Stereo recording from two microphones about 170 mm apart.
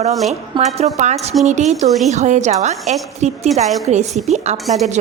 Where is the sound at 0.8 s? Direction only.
40° right (ahead or behind).